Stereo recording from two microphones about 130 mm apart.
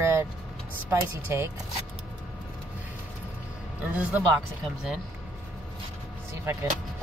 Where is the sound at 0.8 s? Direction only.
20° right (ahead or behind).